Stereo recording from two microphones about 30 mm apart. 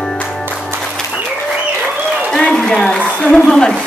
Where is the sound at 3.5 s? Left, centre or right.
Centre.